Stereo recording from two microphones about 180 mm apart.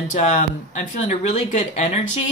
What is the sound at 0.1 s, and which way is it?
Speech, 45° left (ahead or behind).